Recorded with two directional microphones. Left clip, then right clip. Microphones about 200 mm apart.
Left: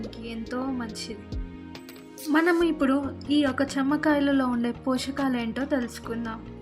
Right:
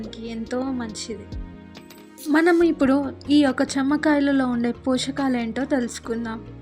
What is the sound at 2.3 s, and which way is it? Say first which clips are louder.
A woman's voice: right 5 dB; 20° right (ahead or behind).